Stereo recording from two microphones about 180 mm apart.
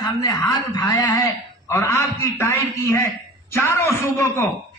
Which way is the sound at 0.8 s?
20° left (ahead or behind).